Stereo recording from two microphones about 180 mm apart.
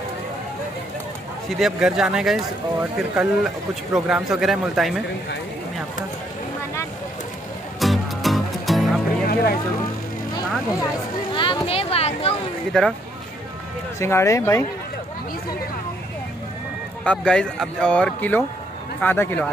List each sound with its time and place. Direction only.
1.6 s speech: 5° right (ahead or behind)
7.8 s music: centre (ahead or behind)
9.3 s vehicle: 60° left (ahead or behind)
11.3 s a sound: 25° left (ahead or behind)
12.7 s speech: 5° left (ahead or behind)
13.9 s speech: 15° left (ahead or behind)
17.0 s speech: 5° left (ahead or behind)